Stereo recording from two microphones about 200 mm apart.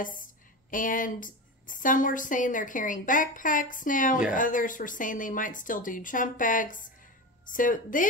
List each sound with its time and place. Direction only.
0.7 s a woman's voice: 40° left (ahead or behind)